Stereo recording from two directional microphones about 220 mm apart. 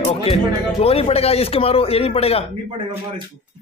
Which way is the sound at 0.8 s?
25° left (ahead or behind).